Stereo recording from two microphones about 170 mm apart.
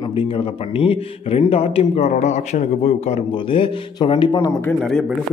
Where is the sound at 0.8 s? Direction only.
35° left (ahead or behind).